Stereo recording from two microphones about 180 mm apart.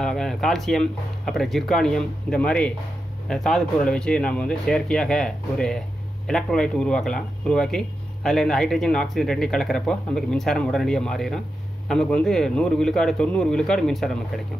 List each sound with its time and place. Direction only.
0.0 s speech: centre (ahead or behind)